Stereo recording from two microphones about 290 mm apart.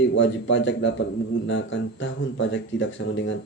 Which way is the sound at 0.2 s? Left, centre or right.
Left.